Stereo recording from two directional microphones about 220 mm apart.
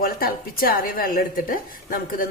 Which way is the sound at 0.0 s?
40° left (ahead or behind).